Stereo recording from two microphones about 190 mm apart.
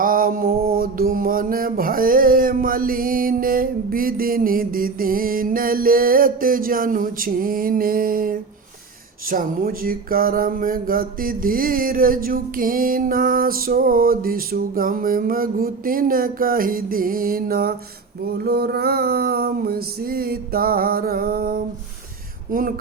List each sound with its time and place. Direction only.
0.0 s music: 50° right (ahead or behind)